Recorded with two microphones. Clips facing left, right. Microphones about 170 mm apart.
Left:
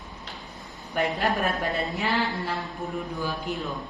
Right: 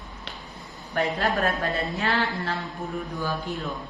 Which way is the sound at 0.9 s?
20° left (ahead or behind).